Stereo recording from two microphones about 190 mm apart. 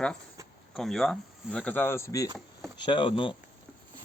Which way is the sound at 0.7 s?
Centre (ahead or behind).